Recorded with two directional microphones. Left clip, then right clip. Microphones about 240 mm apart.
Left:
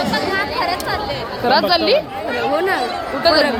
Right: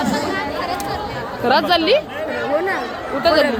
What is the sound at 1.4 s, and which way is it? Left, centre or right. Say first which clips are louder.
Speech: left 1 dB; centre.